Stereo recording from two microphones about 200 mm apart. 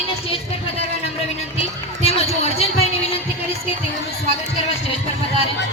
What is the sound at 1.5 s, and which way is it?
Run, 30° left (ahead or behind).